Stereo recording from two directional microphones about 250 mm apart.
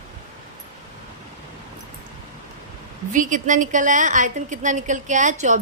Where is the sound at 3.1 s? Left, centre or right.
Right.